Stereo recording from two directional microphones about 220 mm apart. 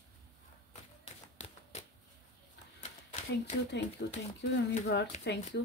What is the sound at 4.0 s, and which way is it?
Speech, 50° left (ahead or behind).